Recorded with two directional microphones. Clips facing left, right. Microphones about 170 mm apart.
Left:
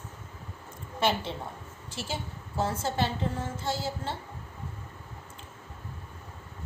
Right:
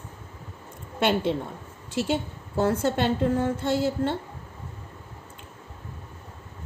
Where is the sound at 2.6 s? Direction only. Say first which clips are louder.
Right 6 dB; 60° right (ahead or behind).